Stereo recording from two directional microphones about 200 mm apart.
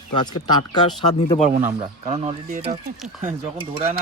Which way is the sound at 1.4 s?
40° right (ahead or behind).